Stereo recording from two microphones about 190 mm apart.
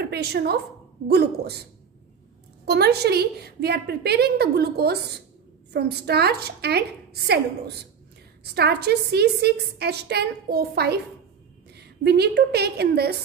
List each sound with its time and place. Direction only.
0.1 s a woman's voice: 60° right (ahead or behind)
2.6 s a woman's voice: 60° right (ahead or behind)
8.5 s a woman's voice: 60° right (ahead or behind)